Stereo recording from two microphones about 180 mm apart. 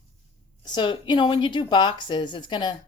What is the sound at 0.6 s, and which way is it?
A woman's voice, 25° left (ahead or behind).